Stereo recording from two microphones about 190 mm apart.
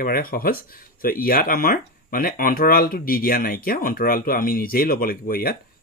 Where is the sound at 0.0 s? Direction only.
50° left (ahead or behind).